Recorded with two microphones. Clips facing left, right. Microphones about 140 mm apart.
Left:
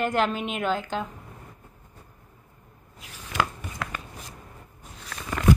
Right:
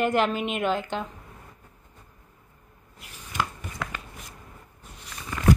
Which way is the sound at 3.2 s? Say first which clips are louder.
Left 3 dB; 90° left.